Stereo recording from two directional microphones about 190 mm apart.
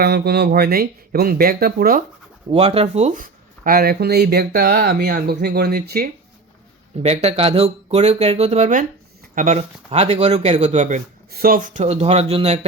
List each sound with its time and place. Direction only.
0.0 s speech: 55° right (ahead or behind)
2.5 s speech: 30° right (ahead or behind); by 6.1 s 55° right (ahead or behind)
7.0 s speech: 35° right (ahead or behind)
11.3 s speech: 50° right (ahead or behind); by 12.5 s 35° right (ahead or behind)